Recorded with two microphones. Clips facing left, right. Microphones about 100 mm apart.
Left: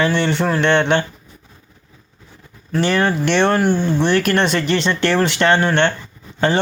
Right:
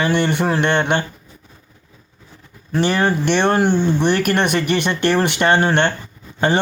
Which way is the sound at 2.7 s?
15° right (ahead or behind).